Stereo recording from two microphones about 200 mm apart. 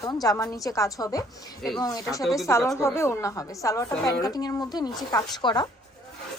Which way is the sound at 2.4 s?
15° left (ahead or behind).